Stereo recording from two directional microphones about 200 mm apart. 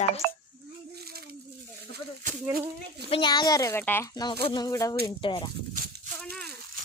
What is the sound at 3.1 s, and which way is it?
Speech, 20° left (ahead or behind).